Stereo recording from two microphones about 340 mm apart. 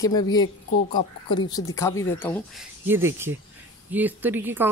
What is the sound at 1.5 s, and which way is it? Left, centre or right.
Speech, centre.